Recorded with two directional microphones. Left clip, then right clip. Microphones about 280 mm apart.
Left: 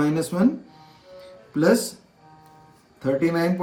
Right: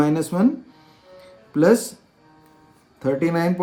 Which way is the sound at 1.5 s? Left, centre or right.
Right.